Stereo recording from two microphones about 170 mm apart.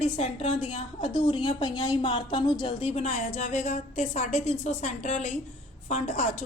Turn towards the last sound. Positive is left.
turn(degrees=45)  # may be behind; listen again after turning